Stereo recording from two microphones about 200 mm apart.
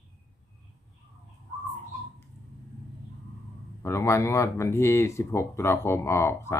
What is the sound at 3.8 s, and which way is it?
Speech, 15° left (ahead or behind).